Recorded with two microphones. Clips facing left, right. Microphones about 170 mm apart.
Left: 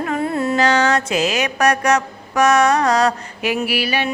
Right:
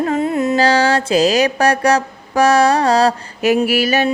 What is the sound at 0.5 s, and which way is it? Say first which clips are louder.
Mantra: right 2 dB; 30° right (ahead or behind).